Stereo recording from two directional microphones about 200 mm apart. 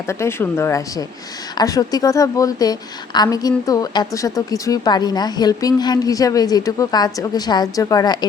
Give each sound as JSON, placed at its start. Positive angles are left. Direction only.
{"t": 0.1, "sound": "a woman's voice", "side_deg": 15}